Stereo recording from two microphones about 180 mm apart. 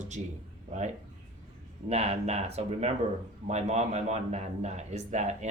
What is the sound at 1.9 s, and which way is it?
Speech, 35° right (ahead or behind).